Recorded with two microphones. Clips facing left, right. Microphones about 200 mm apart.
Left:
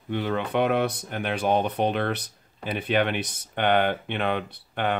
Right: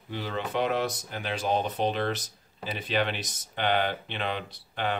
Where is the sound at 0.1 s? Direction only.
60° left (ahead or behind).